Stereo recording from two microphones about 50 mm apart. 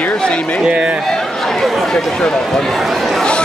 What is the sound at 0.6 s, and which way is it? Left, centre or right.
Speech, right.